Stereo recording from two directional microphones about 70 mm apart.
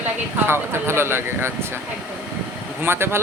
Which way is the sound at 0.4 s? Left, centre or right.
Right.